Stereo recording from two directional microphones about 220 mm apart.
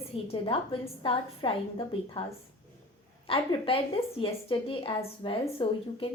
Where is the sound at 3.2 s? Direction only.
25° left (ahead or behind).